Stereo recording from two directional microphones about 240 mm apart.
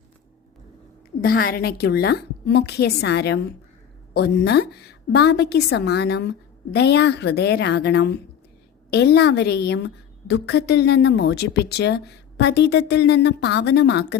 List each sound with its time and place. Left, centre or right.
1.2 s a woman's voice: left